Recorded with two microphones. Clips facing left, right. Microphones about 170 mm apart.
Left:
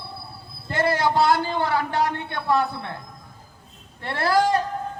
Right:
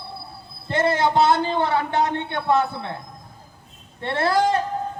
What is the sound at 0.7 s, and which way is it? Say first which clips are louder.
A man's voice: right 2 dB; 20° right (ahead or behind).